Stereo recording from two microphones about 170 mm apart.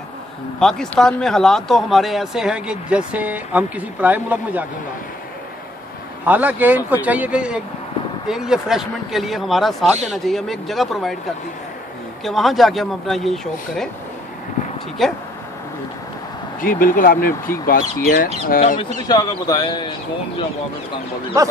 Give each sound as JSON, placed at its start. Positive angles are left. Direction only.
{"t": 0.6, "sound": "speech", "side_deg": 5}
{"t": 6.2, "sound": "speech", "side_deg": -10}
{"t": 12.3, "sound": "speech", "side_deg": 0}
{"t": 15.0, "sound": "speech", "side_deg": 0}
{"t": 16.6, "sound": "speech", "side_deg": 55}
{"t": 19.0, "sound": "a man's voice", "side_deg": 20}